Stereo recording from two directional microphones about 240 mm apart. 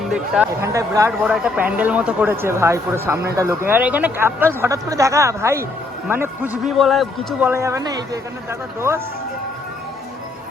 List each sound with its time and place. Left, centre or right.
0.1 s speech: centre
7.5 s speech: centre